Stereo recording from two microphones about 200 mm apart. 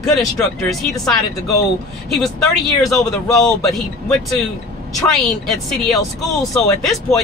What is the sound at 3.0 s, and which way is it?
Speech, 15° left (ahead or behind).